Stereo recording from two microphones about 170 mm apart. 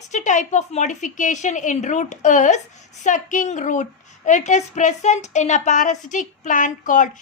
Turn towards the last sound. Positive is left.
turn(degrees=50)  # may be behind; listen again after turning